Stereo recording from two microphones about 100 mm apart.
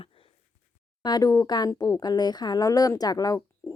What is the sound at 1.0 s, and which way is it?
A woman's voice, 40° left (ahead or behind).